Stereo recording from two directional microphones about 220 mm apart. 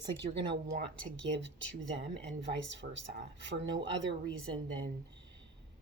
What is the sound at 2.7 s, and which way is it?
Speech, 55° right (ahead or behind).